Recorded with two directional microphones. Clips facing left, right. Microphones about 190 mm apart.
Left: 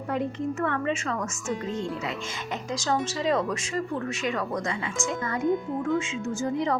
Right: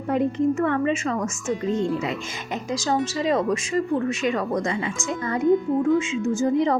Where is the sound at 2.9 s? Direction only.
15° right (ahead or behind).